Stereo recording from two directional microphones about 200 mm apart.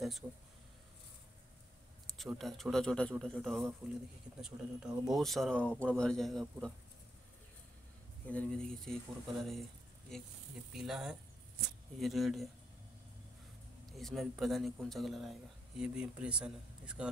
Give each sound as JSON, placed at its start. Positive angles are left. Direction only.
{"t": 0.2, "sound": "speech", "side_deg": -5}
{"t": 2.0, "sound": "speech", "side_deg": 0}
{"t": 8.3, "sound": "speech", "side_deg": 5}
{"t": 13.8, "sound": "speech", "side_deg": 0}